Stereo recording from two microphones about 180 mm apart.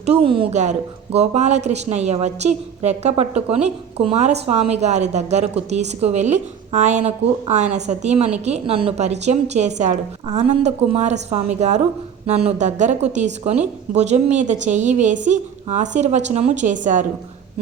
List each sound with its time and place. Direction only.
0.0 s a woman's voice: 35° right (ahead or behind)